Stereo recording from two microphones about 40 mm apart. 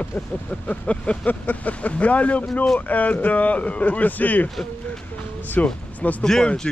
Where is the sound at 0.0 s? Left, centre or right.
Left.